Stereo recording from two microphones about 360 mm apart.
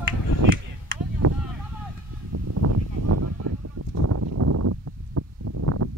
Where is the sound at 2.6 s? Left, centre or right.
Right.